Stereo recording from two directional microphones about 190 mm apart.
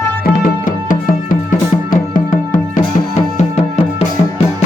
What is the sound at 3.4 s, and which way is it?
Music, 35° left (ahead or behind).